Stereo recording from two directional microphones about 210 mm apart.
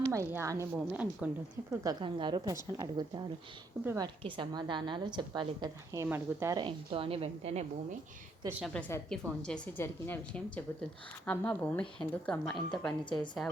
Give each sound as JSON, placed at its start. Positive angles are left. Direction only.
{"t": 0.1, "sound": "a woman's voice", "side_deg": -10}
{"t": 8.4, "sound": "a woman's voice", "side_deg": -5}
{"t": 8.7, "sound": "a woman's voice", "side_deg": 5}
{"t": 13.1, "sound": "a woman's voice", "side_deg": 20}